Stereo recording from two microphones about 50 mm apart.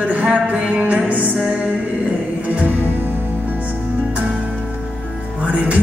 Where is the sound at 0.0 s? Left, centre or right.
Right.